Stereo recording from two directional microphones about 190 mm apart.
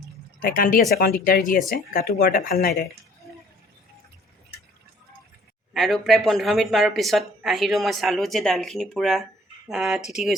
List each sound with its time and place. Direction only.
0.4 s speech: 50° left (ahead or behind)
5.7 s speech: centre (ahead or behind)